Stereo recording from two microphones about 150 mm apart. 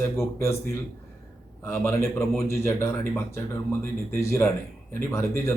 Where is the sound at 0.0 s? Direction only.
20° left (ahead or behind).